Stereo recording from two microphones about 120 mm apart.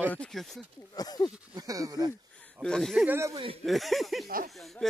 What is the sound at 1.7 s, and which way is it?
Speech, 30° right (ahead or behind).